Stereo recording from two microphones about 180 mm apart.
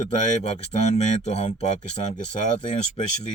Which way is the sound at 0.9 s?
35° left (ahead or behind).